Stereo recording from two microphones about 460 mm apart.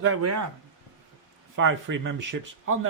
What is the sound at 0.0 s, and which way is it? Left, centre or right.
Speech, right.